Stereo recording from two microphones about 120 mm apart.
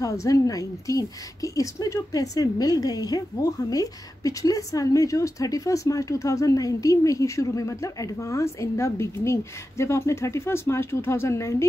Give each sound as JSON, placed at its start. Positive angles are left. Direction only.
{"t": 0.0, "sound": "a woman's voice", "side_deg": 30}